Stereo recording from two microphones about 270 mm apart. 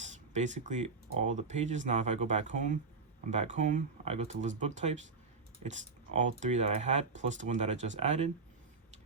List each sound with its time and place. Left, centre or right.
0.0 s speech: right